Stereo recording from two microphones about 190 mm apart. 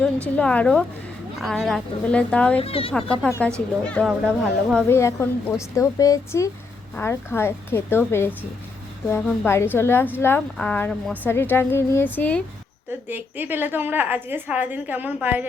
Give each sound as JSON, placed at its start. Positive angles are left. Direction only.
{"t": 0.3, "sound": "speech", "side_deg": 5}
{"t": 2.6, "sound": "speech", "side_deg": 30}
{"t": 3.4, "sound": "a woman's voice", "side_deg": 5}
{"t": 13.1, "sound": "a woman's voice", "side_deg": -10}